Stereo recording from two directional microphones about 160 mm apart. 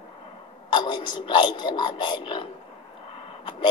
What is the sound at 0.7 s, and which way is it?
A man's voice, 30° left (ahead or behind).